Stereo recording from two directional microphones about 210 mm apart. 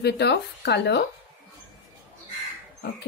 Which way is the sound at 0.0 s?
55° left (ahead or behind).